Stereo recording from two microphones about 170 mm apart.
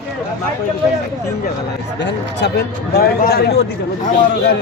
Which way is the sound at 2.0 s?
90° left.